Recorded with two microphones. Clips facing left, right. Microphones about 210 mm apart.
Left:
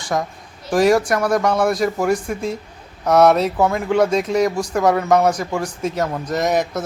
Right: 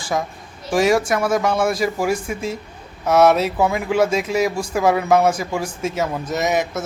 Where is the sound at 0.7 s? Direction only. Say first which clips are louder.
Left 2 dB; centre (ahead or behind).